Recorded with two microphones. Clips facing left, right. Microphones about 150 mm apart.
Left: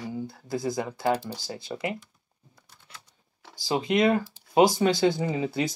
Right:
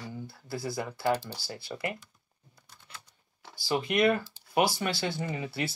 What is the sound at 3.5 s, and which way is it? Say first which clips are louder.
Speech: left 4 dB; 20° left (ahead or behind).